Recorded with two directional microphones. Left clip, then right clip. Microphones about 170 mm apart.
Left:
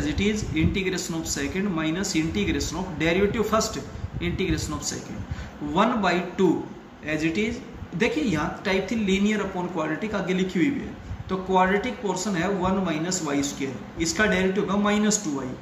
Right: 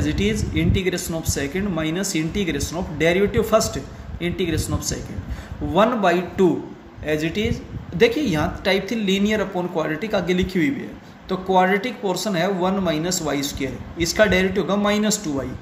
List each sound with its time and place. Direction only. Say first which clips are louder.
0.0 s speech: right 3 dB; 55° right (ahead or behind)